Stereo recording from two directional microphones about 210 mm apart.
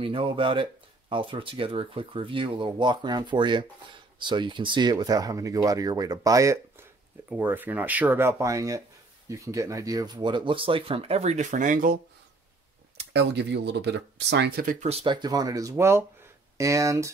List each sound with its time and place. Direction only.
0.0 s speech: 25° right (ahead or behind); by 12.0 s 40° right (ahead or behind)
13.1 s speech: 55° right (ahead or behind); by 17.1 s 15° right (ahead or behind)